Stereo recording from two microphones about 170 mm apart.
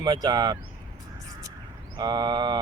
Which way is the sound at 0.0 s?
25° right (ahead or behind).